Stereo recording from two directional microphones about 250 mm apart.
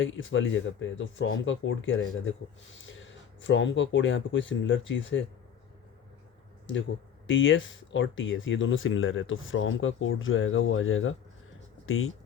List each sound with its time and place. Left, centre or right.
0.0 s speech: left
7.3 s speech: left